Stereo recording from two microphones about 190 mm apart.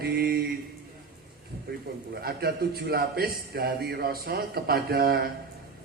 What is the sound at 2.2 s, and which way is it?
A man's voice, 55° right (ahead or behind).